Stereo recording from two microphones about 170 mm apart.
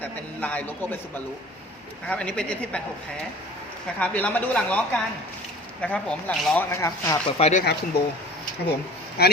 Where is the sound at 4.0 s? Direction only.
10° left (ahead or behind).